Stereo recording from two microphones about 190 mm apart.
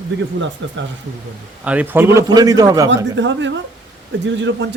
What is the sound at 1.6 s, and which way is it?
A man's voice, 5° right (ahead or behind).